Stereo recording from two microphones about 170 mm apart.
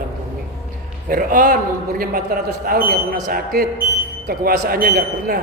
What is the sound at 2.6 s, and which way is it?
A man's voice, 60° right (ahead or behind).